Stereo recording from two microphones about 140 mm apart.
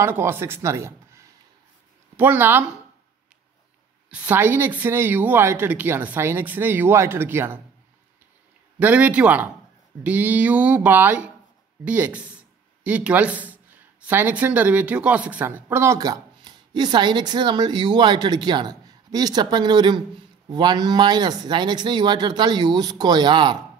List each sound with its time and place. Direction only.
0.0 s a woman's voice: 15° right (ahead or behind)
4.1 s a woman's voice: 10° right (ahead or behind)
8.7 s a woman's voice: 10° right (ahead or behind); by 23.6 s 35° right (ahead or behind)